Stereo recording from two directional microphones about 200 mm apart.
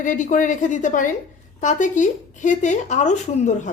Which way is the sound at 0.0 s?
40° left (ahead or behind).